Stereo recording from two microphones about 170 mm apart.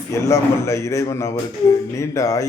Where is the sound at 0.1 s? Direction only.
15° left (ahead or behind).